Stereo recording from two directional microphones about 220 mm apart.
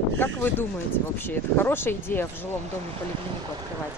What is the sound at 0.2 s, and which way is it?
Speech, 10° left (ahead or behind).